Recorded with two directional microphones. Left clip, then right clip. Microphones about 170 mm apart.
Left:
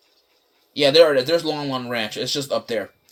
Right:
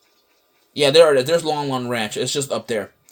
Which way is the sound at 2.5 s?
90° right.